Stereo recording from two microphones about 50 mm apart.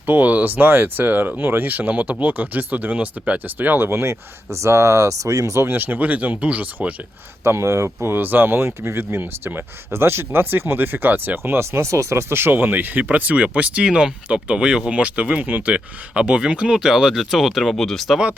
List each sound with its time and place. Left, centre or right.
0.0 s speech: right
3.8 s speech: right
5.6 s speech: right
7.4 s speech: right
8.0 s speech: right
11.5 s speech: right
11.9 s speech: right
12.3 s speech: right; by 16.9 s centre
16.9 s speech: centre
17.7 s speech: centre